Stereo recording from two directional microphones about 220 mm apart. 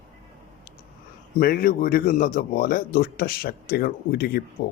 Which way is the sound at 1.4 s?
40° left (ahead or behind).